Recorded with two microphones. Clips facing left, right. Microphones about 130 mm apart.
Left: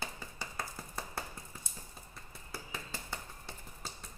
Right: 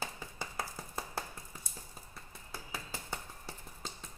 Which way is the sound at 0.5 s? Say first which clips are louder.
Right 1 dB; 30° right (ahead or behind).